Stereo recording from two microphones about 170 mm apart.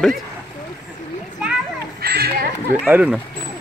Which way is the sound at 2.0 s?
70° right (ahead or behind).